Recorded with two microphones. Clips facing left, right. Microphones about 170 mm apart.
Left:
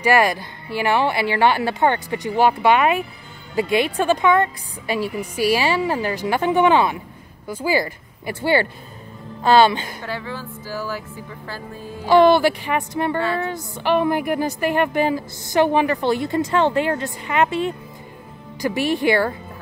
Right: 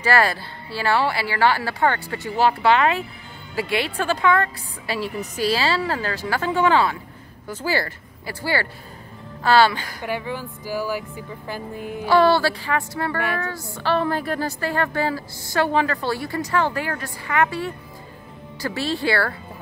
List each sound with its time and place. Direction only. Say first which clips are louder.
0.0 s a woman's voice: left 3 dB; 15° left (ahead or behind)
10.0 s speech: right 7 dB; 15° right (ahead or behind)
12.1 s a woman's voice: left 4 dB; 20° left (ahead or behind)